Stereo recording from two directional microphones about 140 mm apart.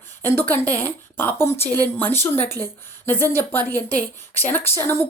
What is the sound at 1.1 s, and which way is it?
Speech, 15° left (ahead or behind).